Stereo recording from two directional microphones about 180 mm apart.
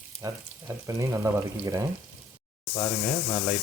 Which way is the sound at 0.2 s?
20° right (ahead or behind).